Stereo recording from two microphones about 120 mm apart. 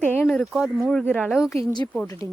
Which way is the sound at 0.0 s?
15° left (ahead or behind).